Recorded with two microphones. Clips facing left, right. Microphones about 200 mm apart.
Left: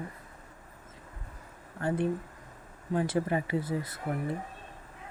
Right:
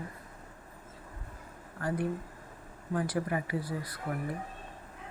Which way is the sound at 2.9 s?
25° left (ahead or behind).